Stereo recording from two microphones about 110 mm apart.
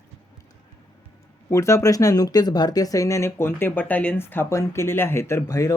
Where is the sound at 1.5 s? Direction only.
25° left (ahead or behind).